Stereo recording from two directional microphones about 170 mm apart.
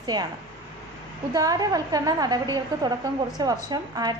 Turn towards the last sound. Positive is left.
turn(degrees=-25)  # may be behind; listen again after turning